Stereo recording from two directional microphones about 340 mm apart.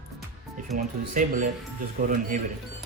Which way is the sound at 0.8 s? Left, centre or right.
Right.